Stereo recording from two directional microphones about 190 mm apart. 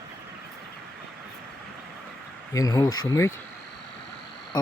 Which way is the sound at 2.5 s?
20° left (ahead or behind).